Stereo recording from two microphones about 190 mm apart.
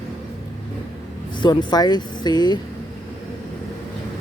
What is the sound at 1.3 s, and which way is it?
Speech, 25° left (ahead or behind).